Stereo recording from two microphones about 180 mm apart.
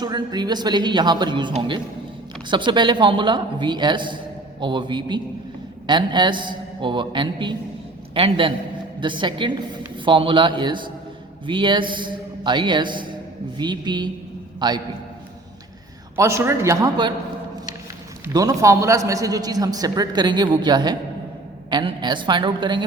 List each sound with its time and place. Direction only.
0.0 s a man's voice: 25° right (ahead or behind)
16.1 s a man's voice: 15° right (ahead or behind)
18.3 s a man's voice: 20° right (ahead or behind)